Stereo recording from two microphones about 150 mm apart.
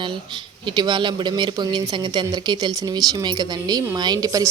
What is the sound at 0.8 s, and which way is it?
Speech, 30° right (ahead or behind).